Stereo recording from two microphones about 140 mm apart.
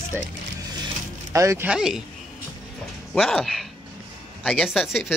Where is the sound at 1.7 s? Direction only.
5° right (ahead or behind).